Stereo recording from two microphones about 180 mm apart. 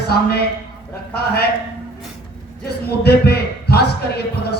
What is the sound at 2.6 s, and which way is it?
A man's voice, 60° left (ahead or behind).